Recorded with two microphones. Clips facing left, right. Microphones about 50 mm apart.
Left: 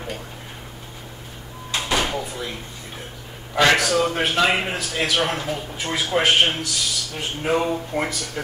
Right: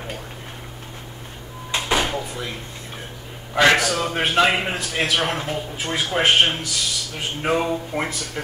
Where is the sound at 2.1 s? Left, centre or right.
Centre.